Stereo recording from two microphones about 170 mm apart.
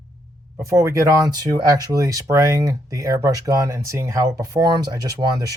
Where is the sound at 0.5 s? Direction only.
15° right (ahead or behind).